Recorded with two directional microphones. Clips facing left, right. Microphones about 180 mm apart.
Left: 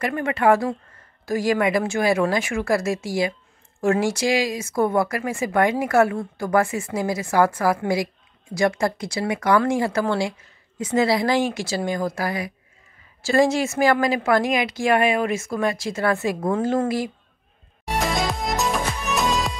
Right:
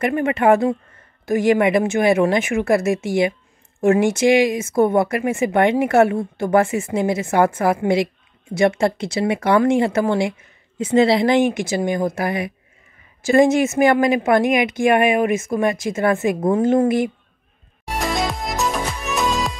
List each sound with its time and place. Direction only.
0.0 s speech: 20° right (ahead or behind)
17.9 s music: centre (ahead or behind)